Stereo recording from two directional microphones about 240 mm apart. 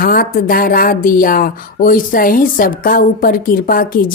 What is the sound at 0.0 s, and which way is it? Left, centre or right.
Speech, left.